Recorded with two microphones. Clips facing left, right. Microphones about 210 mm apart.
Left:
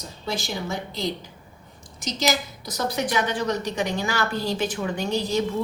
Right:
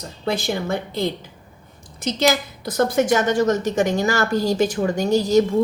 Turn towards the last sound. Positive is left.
turn(degrees=-45)  # may be behind; listen again after turning